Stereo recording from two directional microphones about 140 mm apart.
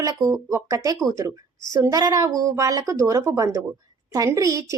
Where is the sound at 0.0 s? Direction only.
25° right (ahead or behind).